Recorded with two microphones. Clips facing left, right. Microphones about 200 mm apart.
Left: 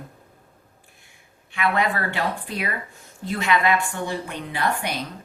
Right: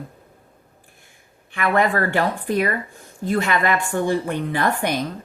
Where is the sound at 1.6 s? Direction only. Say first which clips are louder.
Right 4 dB; 50° right (ahead or behind).